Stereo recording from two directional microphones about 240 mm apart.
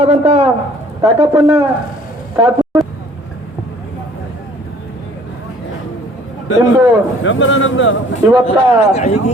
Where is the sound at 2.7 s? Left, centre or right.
Centre.